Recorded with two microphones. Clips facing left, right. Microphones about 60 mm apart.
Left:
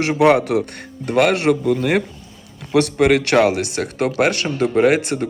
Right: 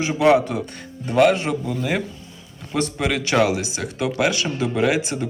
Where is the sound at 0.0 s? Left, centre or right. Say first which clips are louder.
Left 2 dB; left.